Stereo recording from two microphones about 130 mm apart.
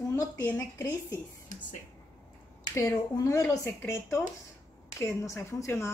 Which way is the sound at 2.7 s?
25° left (ahead or behind).